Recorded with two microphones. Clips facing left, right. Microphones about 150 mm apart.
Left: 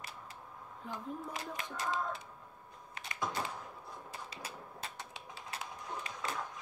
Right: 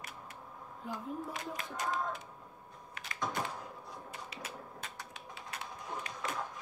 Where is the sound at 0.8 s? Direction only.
5° right (ahead or behind).